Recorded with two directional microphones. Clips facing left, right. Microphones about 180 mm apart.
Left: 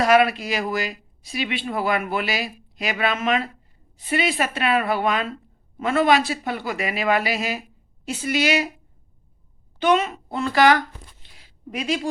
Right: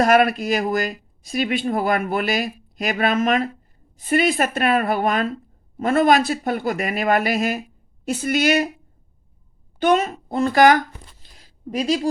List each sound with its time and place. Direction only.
0.0 s speech: 45° right (ahead or behind)
9.8 s speech: 45° right (ahead or behind)
11.2 s a sound: 40° right (ahead or behind)